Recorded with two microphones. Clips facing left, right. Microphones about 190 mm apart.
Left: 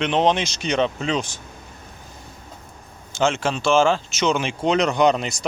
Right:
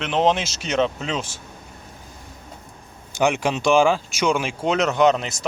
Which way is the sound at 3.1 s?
15° right (ahead or behind).